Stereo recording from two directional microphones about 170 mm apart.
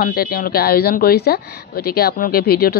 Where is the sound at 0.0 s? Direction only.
60° left (ahead or behind).